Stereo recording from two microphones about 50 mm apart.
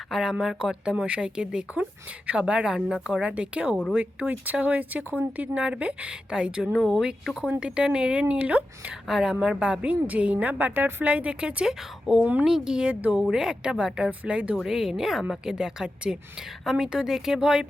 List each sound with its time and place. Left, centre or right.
0.1 s speech: centre
6.7 s speech: centre
7.6 s speech: centre
9.0 s speech: centre
9.8 s speech: right
10.3 s speech: right
11.0 s speech: right
12.2 s speech: right
12.5 s speech: centre
12.9 s speech: right
13.3 s speech: centre
14.5 s speech: centre